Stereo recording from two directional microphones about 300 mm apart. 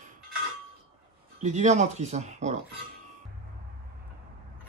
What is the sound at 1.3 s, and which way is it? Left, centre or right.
Speech, right.